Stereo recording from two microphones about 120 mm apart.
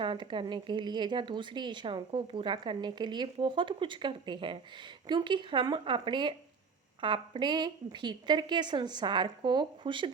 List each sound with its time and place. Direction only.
0.0 s speech: 40° right (ahead or behind)